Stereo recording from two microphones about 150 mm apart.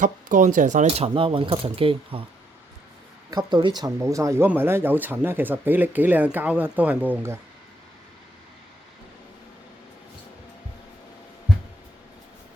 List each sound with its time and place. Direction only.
0.0 s speech: 60° right (ahead or behind)
0.9 s speech: 40° right (ahead or behind)
3.2 s speech: 30° right (ahead or behind); by 7.3 s 15° right (ahead or behind)